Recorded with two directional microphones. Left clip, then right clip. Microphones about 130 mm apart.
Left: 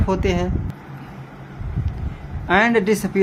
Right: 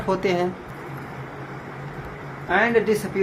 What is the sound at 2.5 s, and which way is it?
Speech, 55° left (ahead or behind).